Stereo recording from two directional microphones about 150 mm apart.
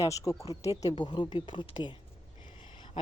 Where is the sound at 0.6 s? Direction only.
45° left (ahead or behind).